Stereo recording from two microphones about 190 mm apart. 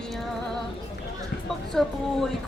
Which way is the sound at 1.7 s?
Centre (ahead or behind).